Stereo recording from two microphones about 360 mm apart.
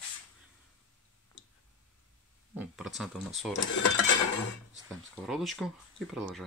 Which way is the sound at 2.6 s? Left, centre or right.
Centre.